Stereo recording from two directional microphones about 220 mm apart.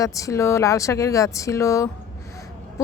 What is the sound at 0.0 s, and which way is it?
Speech, 15° left (ahead or behind).